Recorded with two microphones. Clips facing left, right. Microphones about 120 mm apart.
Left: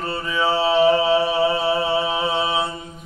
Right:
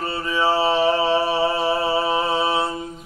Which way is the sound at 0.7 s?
Centre (ahead or behind).